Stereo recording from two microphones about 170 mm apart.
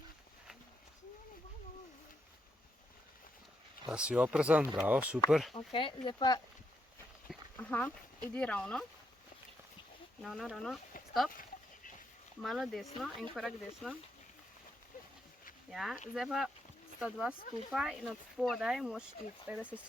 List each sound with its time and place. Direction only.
3.8 s speech: 5° right (ahead or behind)
5.5 s speech: 30° left (ahead or behind)
7.3 s speech: 10° left (ahead or behind)
10.2 s speech: centre (ahead or behind)
12.4 s speech: centre (ahead or behind)
15.7 s speech: centre (ahead or behind)